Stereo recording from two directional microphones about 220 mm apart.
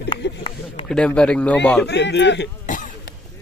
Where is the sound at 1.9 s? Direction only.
50° left (ahead or behind).